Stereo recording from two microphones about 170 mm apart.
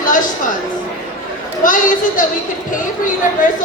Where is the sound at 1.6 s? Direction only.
50° left (ahead or behind).